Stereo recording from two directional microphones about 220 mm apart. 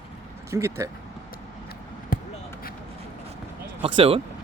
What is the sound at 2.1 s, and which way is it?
Basketball bounce, 40° left (ahead or behind).